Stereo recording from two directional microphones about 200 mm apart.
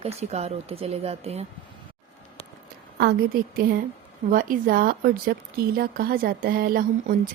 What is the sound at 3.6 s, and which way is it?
Speech, 45° right (ahead or behind).